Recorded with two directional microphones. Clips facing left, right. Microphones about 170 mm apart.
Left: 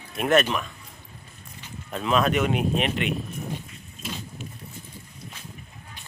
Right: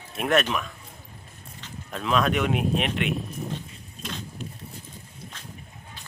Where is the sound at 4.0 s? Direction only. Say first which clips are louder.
Even; 5° left (ahead or behind).